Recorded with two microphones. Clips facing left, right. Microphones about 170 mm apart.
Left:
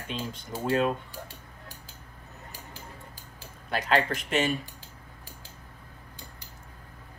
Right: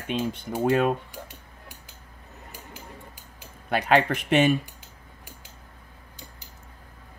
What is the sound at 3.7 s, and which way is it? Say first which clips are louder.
Speech: right 5 dB; 60° right (ahead or behind).